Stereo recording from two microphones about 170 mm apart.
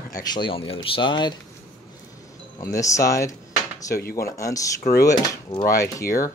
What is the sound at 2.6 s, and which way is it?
Speech, 20° left (ahead or behind).